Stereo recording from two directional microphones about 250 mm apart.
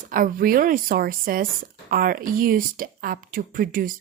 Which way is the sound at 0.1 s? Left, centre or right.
Right.